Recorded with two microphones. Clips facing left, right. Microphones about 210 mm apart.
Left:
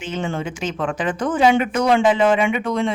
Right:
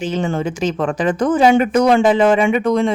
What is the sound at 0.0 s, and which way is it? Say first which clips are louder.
Speech: right 5 dB; 40° right (ahead or behind).